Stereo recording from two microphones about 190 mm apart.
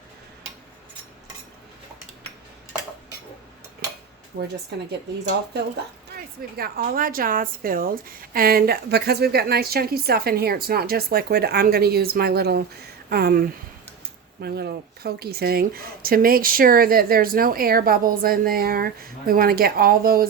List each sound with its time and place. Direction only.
4.3 s speech: 55° right (ahead or behind)